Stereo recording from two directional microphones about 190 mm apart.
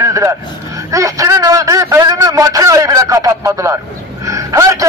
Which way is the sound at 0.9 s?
15° right (ahead or behind).